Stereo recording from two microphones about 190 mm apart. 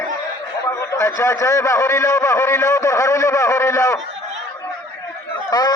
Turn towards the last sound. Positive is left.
turn(degrees=20)  # may be behind; listen again after turning